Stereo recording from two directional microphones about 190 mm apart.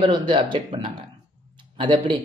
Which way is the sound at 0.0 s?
25° right (ahead or behind).